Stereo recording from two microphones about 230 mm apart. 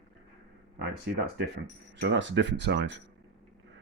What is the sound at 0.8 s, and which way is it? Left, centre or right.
Speech, right.